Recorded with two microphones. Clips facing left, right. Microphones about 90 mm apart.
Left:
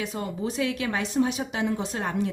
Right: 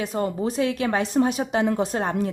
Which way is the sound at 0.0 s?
45° right (ahead or behind).